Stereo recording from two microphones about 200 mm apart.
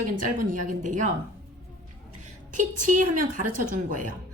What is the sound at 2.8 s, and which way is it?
A woman's voice, 40° right (ahead or behind).